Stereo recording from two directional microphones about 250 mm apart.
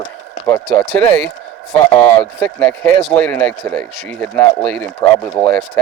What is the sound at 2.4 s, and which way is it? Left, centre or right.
Speech, centre.